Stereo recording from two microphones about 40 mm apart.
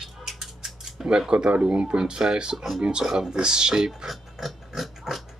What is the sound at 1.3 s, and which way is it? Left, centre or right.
Speech, right.